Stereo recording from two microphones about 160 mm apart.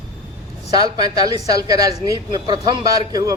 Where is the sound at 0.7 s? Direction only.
25° right (ahead or behind).